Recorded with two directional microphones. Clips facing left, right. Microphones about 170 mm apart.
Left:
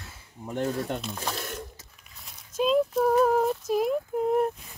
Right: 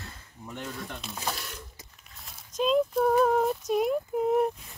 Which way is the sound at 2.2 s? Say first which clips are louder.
Left 2 dB; centre (ahead or behind).